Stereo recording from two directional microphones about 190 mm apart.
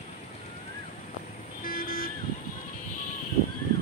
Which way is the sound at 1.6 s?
50° left (ahead or behind).